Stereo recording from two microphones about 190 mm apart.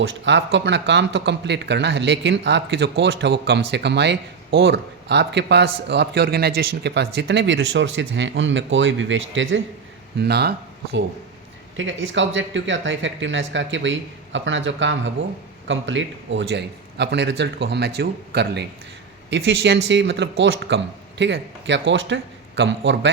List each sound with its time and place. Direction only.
0.0 s speech: 70° right (ahead or behind)
10.2 s a man's voice: 60° right (ahead or behind)
11.8 s a man's voice: 80° right; by 18.6 s 60° right (ahead or behind)
19.3 s speech: 70° right (ahead or behind)